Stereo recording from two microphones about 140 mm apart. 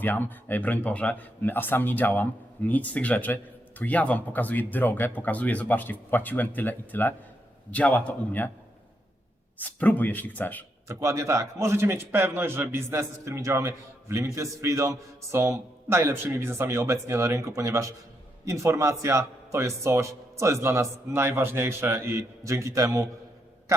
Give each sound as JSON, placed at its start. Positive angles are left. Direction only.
{"t": 0.0, "sound": "a man's voice", "side_deg": 15}
{"t": 9.6, "sound": "a man's voice", "side_deg": 10}
{"t": 10.8, "sound": "a man's voice", "side_deg": -20}